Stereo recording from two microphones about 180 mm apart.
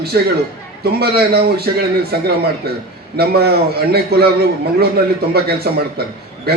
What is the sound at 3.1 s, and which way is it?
A man's voice, 60° right (ahead or behind).